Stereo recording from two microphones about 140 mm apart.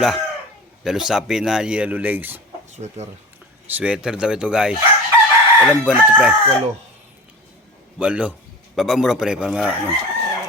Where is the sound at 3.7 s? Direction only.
10° right (ahead or behind).